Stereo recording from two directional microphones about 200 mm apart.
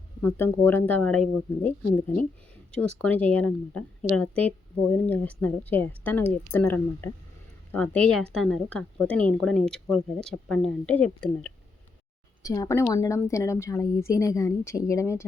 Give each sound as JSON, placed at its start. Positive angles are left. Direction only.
{"t": 0.2, "sound": "a woman's voice", "side_deg": 10}
{"t": 2.7, "sound": "a woman's voice", "side_deg": 5}
{"t": 12.4, "sound": "a woman's voice", "side_deg": 15}